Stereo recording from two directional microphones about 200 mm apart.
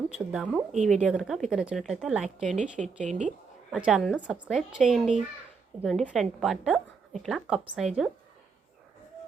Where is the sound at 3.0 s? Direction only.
35° right (ahead or behind).